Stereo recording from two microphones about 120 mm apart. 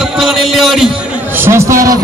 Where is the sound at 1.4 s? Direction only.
25° right (ahead or behind).